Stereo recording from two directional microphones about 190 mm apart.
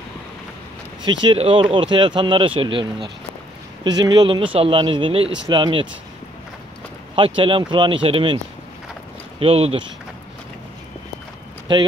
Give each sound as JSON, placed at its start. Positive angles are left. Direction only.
{"t": 1.2, "sound": "speech", "side_deg": -30}
{"t": 7.2, "sound": "speech", "side_deg": -25}
{"t": 9.4, "sound": "speech", "side_deg": -30}
{"t": 11.7, "sound": "speech", "side_deg": -25}